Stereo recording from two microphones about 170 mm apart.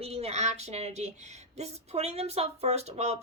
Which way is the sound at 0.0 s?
35° right (ahead or behind).